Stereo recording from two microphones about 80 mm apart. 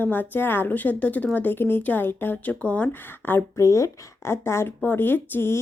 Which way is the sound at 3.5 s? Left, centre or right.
Left.